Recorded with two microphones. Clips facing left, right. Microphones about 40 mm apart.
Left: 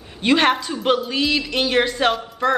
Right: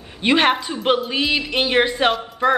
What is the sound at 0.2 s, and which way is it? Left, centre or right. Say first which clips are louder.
A woman's voice: even; centre.